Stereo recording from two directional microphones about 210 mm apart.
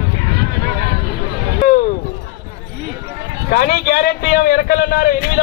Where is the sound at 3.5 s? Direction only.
45° left (ahead or behind).